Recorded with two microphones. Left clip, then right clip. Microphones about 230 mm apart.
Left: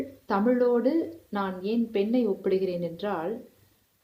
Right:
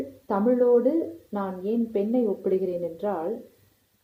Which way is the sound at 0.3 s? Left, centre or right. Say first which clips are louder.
Right 3 dB; centre.